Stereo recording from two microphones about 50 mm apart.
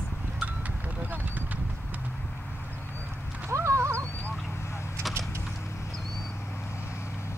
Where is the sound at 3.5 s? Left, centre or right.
Right.